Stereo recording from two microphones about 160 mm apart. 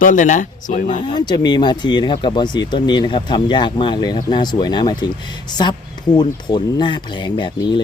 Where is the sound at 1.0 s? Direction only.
25° left (ahead or behind).